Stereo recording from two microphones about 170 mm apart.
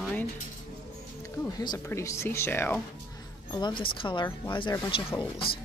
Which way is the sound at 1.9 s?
15° left (ahead or behind).